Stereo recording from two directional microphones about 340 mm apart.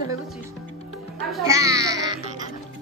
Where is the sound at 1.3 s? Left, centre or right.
Centre.